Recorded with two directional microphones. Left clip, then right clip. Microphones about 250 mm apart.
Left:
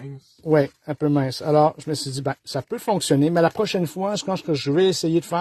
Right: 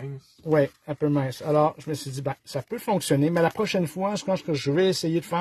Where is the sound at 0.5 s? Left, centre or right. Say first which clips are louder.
Left 3 dB; left.